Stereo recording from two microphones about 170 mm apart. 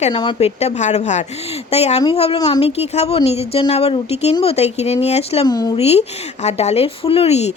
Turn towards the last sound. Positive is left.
turn(degrees=40)  # may be behind; listen again after turning